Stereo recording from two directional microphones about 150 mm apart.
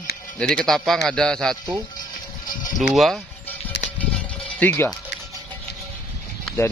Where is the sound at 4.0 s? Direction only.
10° left (ahead or behind).